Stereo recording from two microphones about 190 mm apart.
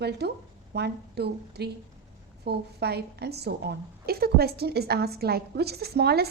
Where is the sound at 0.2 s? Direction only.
60° right (ahead or behind).